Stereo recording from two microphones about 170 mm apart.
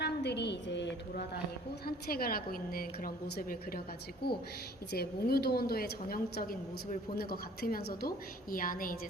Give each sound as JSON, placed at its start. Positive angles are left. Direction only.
{"t": 0.0, "sound": "a woman's voice", "side_deg": 80}
{"t": 2.0, "sound": "a woman's voice", "side_deg": 60}